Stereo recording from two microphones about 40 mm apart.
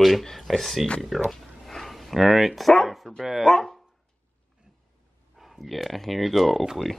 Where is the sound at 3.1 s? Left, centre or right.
Centre.